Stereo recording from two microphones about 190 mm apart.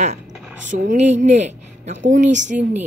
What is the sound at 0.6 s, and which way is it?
A woman's voice, 40° right (ahead or behind).